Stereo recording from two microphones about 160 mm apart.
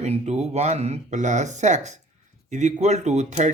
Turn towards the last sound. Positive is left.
turn(degrees=-45)  # may be behind; listen again after turning